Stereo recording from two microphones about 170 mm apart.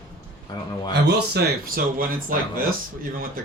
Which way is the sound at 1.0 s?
70° right (ahead or behind).